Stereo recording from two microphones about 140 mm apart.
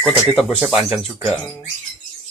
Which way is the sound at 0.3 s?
Centre (ahead or behind).